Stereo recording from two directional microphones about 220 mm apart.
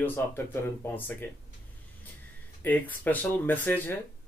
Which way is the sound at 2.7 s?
5° left (ahead or behind).